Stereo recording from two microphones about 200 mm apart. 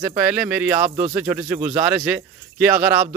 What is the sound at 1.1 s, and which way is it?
Speech, 10° right (ahead or behind).